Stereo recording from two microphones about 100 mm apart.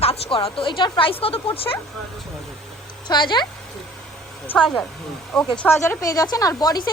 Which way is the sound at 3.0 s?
45° left (ahead or behind).